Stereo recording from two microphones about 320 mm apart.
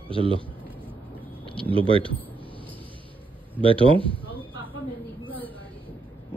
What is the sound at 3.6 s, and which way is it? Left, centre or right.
Speech, centre.